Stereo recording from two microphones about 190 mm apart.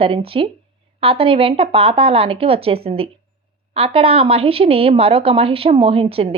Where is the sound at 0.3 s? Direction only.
30° right (ahead or behind).